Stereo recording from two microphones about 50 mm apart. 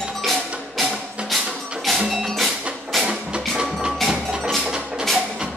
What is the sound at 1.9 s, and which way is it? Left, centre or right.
Music, centre.